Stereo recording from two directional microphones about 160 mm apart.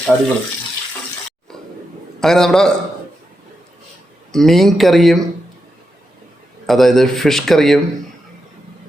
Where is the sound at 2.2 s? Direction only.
Centre (ahead or behind).